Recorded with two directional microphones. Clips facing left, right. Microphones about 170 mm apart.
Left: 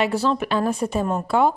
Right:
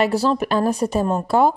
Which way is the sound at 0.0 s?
40° right (ahead or behind).